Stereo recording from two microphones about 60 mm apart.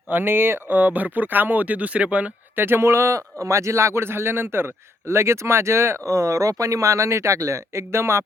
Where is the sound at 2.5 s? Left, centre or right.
Right.